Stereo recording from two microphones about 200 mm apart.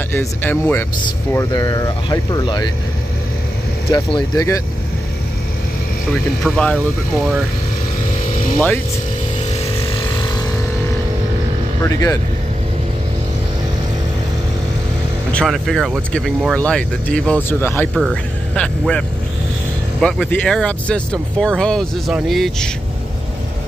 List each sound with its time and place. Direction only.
0.1 s speech: 10° left (ahead or behind)
3.9 s speech: 20° left (ahead or behind)
6.4 s speech: 5° left (ahead or behind)
11.8 s speech: 15° left (ahead or behind)
15.3 s speech: centre (ahead or behind)